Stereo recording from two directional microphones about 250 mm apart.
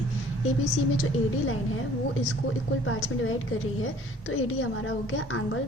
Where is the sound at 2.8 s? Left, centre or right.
Left.